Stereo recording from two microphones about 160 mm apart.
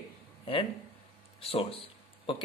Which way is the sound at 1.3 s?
35° left (ahead or behind).